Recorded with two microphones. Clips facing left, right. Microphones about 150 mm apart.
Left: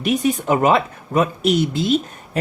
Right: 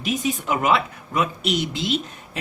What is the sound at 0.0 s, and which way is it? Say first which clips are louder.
Speech: left 6 dB; 60° left (ahead or behind).